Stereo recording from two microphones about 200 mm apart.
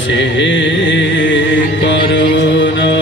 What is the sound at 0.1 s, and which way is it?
Music, 65° left (ahead or behind).